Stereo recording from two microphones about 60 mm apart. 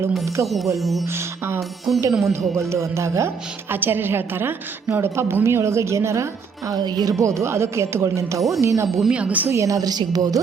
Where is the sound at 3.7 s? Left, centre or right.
Right.